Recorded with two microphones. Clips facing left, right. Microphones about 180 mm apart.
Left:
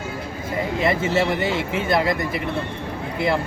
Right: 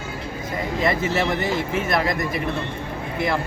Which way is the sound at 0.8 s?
25° left (ahead or behind).